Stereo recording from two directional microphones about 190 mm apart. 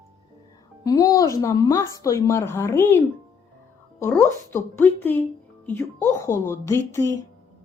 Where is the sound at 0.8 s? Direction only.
20° left (ahead or behind).